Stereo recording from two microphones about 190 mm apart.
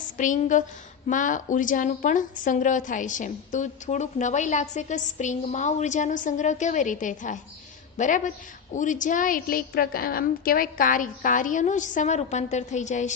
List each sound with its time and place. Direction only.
0.2 s a woman's voice: 40° left (ahead or behind)